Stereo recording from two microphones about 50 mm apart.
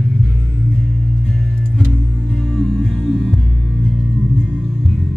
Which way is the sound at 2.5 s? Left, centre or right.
Centre.